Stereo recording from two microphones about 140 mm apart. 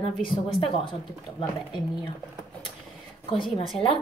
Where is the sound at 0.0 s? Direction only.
40° left (ahead or behind).